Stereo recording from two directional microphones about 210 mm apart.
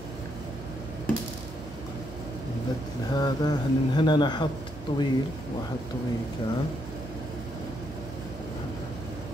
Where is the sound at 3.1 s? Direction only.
20° left (ahead or behind).